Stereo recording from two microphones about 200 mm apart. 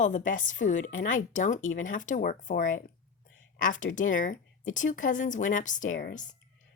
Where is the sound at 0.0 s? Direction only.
40° left (ahead or behind).